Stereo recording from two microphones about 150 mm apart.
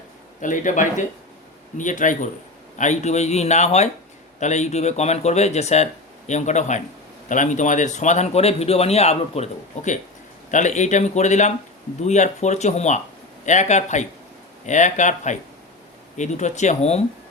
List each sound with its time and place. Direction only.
0.4 s speech: 60° left (ahead or behind)